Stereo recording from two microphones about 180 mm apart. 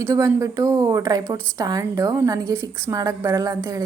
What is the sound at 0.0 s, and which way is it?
A woman's voice, 15° right (ahead or behind).